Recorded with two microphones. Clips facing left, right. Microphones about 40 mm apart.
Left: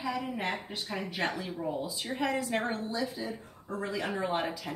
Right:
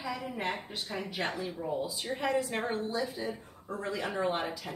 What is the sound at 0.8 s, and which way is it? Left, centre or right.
A woman's voice, centre.